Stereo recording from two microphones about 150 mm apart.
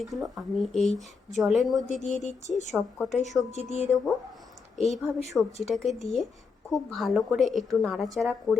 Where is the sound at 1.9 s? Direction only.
50° left (ahead or behind).